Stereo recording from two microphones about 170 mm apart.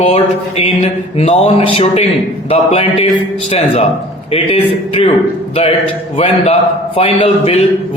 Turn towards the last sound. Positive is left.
turn(degrees=35)  # may be behind; listen again after turning